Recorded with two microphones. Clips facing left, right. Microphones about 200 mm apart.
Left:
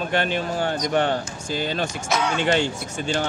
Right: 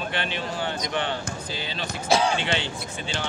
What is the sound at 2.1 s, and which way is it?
Speech, 30° right (ahead or behind).